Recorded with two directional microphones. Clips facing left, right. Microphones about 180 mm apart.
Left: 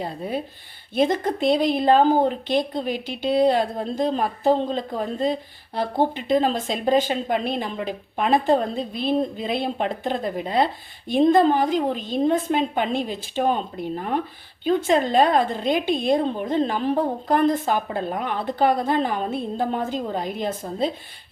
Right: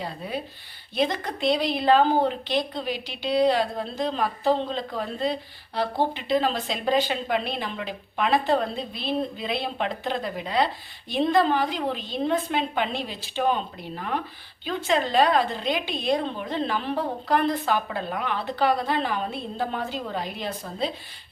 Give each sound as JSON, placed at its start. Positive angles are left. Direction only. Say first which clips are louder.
{"t": 0.0, "sound": "speech", "louder": "left 4 dB", "side_deg": 50}